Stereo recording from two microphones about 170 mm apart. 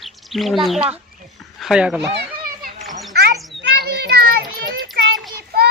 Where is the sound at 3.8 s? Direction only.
65° right (ahead or behind).